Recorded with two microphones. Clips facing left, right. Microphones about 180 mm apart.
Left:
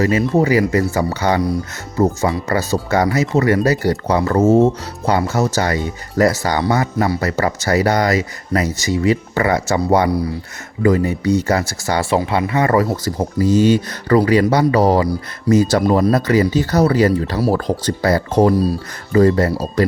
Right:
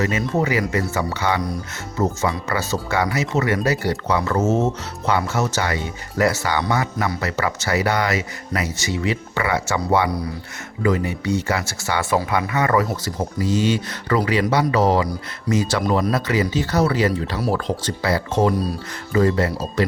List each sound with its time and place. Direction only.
0.0 s speech: 30° left (ahead or behind)
12.1 s speech: 30° left (ahead or behind)